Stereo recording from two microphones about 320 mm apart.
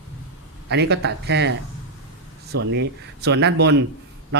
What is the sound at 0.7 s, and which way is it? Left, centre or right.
A man's voice, right.